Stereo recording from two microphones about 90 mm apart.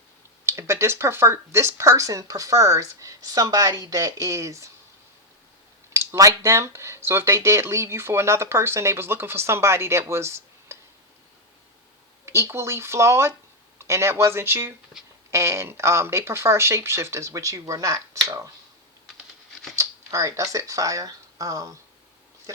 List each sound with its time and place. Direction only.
0.4 s speech: 30° right (ahead or behind)
6.1 s speech: 35° right (ahead or behind)
12.2 s speech: 30° right (ahead or behind)
19.7 s speech: 35° right (ahead or behind)